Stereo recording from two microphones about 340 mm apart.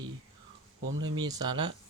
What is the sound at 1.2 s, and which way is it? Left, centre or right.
Speech, centre.